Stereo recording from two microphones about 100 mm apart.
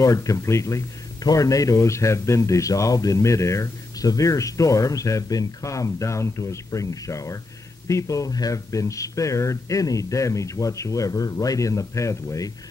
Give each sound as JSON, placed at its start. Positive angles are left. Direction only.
{"t": 0.0, "sound": "a man's voice", "side_deg": 35}